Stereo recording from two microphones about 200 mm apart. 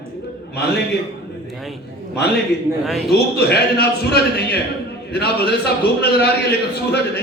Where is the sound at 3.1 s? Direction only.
55° left (ahead or behind).